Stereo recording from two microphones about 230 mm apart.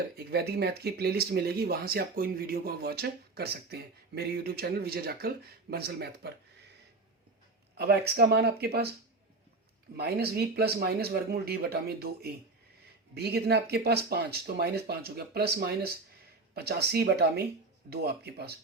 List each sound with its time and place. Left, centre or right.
0.3 s speech: right
7.8 s speech: right
10.0 s speech: right